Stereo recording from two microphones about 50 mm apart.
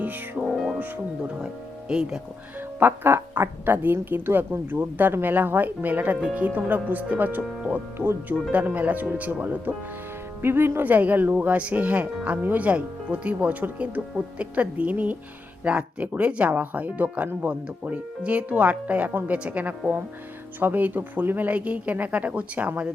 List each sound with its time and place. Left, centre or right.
0.0 s speech: right
0.4 s music: centre
1.9 s speech: centre
2.7 s speech: right
10.4 s speech: right
21.5 s speech: right